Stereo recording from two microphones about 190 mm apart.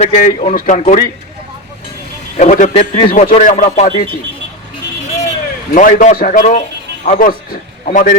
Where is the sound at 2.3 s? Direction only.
40° left (ahead or behind).